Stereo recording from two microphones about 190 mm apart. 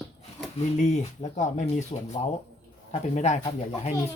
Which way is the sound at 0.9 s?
35° left (ahead or behind).